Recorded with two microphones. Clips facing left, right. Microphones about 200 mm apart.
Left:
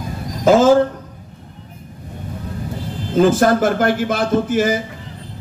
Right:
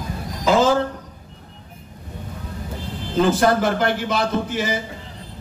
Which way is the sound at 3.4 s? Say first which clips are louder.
Left 3 dB; 50° left (ahead or behind).